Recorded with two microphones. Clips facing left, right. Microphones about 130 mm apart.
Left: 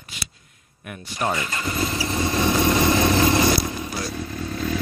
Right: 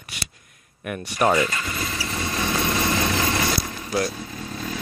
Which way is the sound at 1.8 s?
20° left (ahead or behind).